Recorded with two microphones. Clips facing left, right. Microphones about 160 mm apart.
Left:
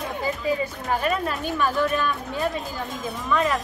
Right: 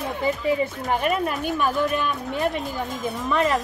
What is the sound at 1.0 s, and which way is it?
Speech, 15° right (ahead or behind).